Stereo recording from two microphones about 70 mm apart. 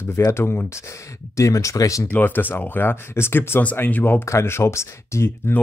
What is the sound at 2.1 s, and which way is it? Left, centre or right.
Speech, left.